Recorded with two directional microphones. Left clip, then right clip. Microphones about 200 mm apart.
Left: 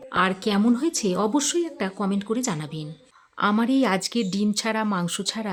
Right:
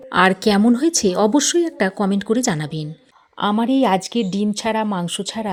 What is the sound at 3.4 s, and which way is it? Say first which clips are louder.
Speech: right 4 dB; 10° right (ahead or behind).